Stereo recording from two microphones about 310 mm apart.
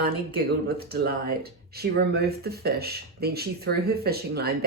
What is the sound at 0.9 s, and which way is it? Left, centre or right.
Speech, right.